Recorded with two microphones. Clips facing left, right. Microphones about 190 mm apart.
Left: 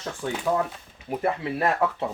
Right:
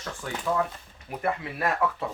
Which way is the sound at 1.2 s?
25° left (ahead or behind).